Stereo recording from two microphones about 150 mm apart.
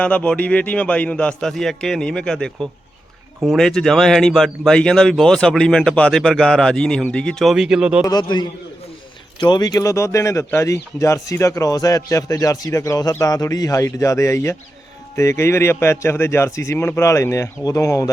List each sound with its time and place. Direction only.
0.0 s a man's voice: 10° left (ahead or behind)
8.0 s a man's voice: 30° left (ahead or behind)